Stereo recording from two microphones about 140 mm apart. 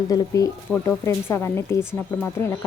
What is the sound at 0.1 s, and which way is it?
A woman's voice, 25° left (ahead or behind).